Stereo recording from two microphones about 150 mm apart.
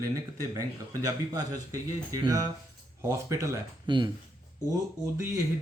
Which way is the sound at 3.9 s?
30° right (ahead or behind).